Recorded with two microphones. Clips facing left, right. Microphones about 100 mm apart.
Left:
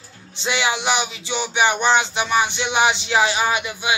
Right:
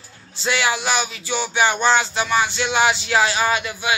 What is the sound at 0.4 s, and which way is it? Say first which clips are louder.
A man's voice: right 1 dB; 20° left (ahead or behind).